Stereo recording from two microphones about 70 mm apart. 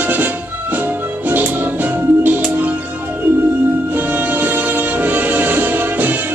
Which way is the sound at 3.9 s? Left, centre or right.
Right.